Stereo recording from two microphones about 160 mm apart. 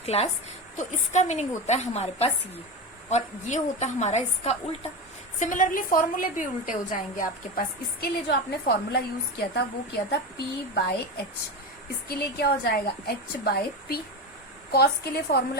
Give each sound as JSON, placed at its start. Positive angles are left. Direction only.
{"t": 0.0, "sound": "a woman's voice", "side_deg": 40}
{"t": 5.4, "sound": "a woman's voice", "side_deg": 55}
{"t": 8.0, "sound": "a woman's voice", "side_deg": 80}
{"t": 12.0, "sound": "a woman's voice", "side_deg": 75}
{"t": 14.7, "sound": "a woman's voice", "side_deg": 90}